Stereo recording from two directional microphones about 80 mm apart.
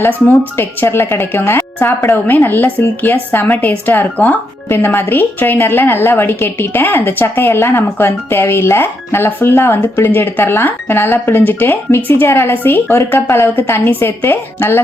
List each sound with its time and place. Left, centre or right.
0.3 s a woman's voice: left